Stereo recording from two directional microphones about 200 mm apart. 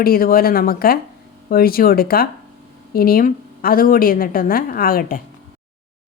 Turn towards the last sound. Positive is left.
turn(degrees=45)  # may be behind; listen again after turning